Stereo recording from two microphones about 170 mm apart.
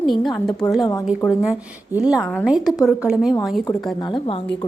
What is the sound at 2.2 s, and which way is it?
Speech, 10° left (ahead or behind).